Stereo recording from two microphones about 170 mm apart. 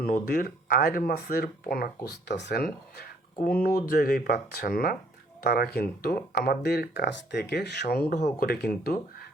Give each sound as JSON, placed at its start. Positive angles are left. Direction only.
{"t": 0.0, "sound": "speech", "side_deg": 60}
{"t": 2.0, "sound": "speech", "side_deg": 85}
{"t": 8.1, "sound": "speech", "side_deg": 55}